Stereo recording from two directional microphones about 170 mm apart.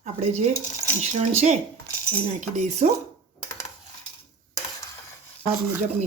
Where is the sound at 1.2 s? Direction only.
45° right (ahead or behind).